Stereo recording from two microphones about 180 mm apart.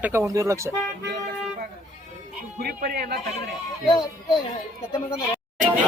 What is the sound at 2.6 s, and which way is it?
Speech, 60° right (ahead or behind).